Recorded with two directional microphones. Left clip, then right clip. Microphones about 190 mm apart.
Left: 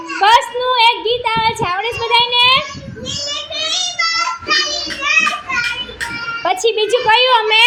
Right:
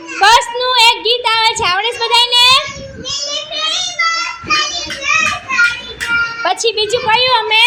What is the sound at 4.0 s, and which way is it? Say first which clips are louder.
Child singing: right 3 dB; 30° left (ahead or behind).